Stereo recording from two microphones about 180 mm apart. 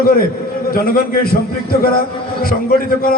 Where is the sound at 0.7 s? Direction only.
55° left (ahead or behind).